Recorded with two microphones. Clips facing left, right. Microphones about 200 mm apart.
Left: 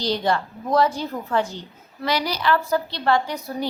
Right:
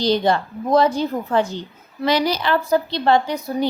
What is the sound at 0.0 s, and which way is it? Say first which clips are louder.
A woman's voice: right 5 dB; 20° right (ahead or behind).